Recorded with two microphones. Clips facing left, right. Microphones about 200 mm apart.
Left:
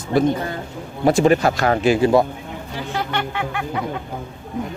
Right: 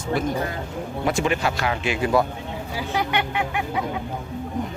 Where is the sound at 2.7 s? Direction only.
15° right (ahead or behind).